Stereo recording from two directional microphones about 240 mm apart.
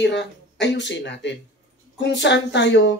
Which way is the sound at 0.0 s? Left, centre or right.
Left.